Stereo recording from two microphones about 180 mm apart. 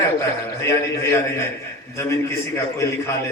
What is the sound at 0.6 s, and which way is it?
A man's voice, 15° left (ahead or behind).